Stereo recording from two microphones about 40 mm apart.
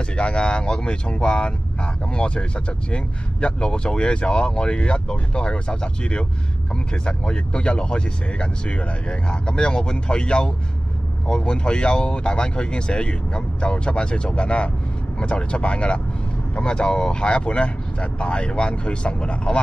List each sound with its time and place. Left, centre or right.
0.1 s speech: left